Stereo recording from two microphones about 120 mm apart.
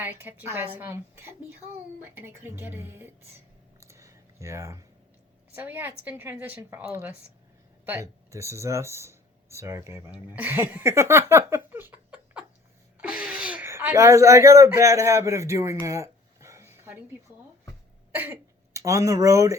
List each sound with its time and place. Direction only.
0.0 s a woman's voice: 15° right (ahead or behind)
3.8 s a sound: 25° right (ahead or behind)
5.5 s a woman's voice: 15° right (ahead or behind)
7.9 s speech: 25° right (ahead or behind)
13.0 s a sound: 10° right (ahead or behind)
18.1 s cough: 15° right (ahead or behind)
18.7 s a woman's voice: 25° right (ahead or behind)